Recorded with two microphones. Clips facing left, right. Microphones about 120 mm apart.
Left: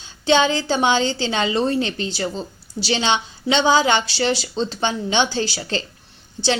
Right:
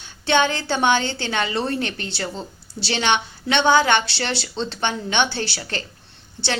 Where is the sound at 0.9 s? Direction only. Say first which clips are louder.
Right 1 dB; 55° right (ahead or behind).